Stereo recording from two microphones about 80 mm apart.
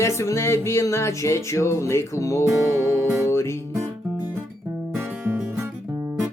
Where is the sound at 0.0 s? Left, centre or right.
Left.